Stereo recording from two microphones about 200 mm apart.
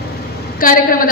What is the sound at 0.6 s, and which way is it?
Speech, 45° left (ahead or behind).